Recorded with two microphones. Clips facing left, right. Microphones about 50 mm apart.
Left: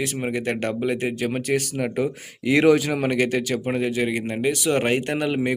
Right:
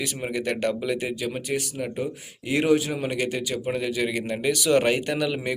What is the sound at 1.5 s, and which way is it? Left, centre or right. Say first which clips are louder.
Speech: left 5 dB; left.